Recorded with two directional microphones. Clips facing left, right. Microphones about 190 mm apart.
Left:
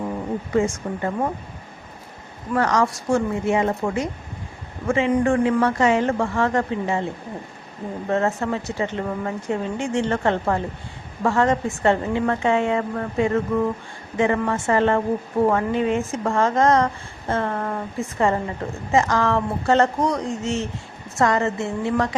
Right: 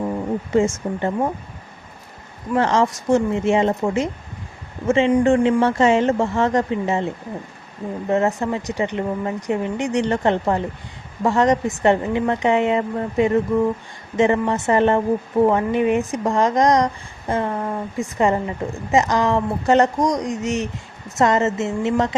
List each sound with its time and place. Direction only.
0.5 s speech: 25° right (ahead or behind)
2.6 s speech: 25° right (ahead or behind)